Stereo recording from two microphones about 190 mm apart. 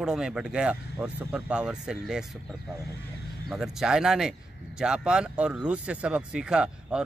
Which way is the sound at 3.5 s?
Centre (ahead or behind).